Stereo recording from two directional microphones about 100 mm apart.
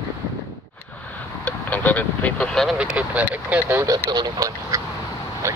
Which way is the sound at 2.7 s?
10° right (ahead or behind).